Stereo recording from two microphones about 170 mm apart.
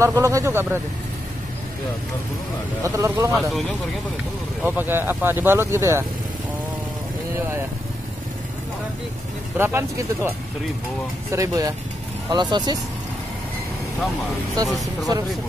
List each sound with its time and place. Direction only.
0.0 s speech: 20° right (ahead or behind)
2.8 s speech: 15° right (ahead or behind)
4.6 s speech: 10° right (ahead or behind)
9.6 s speech: 15° right (ahead or behind)
15.1 s speech: 25° right (ahead or behind)